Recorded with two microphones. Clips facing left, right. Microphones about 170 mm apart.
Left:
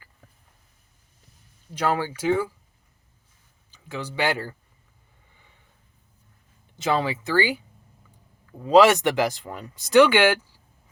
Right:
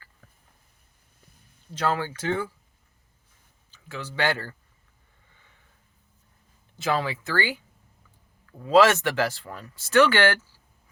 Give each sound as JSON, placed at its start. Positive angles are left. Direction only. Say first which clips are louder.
{"t": 1.7, "sound": "speech", "louder": "left 2 dB", "side_deg": 15}
{"t": 3.7, "sound": "speech", "louder": "left 4 dB", "side_deg": 15}
{"t": 6.7, "sound": "speech", "louder": "left 2 dB", "side_deg": 20}